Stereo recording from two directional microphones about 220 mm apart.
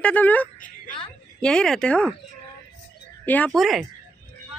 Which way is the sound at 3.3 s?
5° left (ahead or behind).